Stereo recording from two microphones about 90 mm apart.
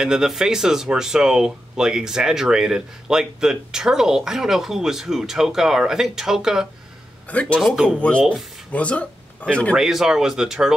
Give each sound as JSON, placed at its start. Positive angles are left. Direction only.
{"t": 0.0, "sound": "speech", "side_deg": -5}
{"t": 7.2, "sound": "a man's voice", "side_deg": 15}
{"t": 7.6, "sound": "speech", "side_deg": -5}
{"t": 8.7, "sound": "speech", "side_deg": 15}
{"t": 9.8, "sound": "speech", "side_deg": -5}